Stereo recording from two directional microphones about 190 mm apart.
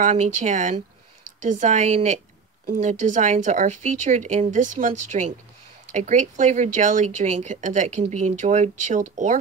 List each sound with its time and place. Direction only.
0.0 s speech: 40° right (ahead or behind)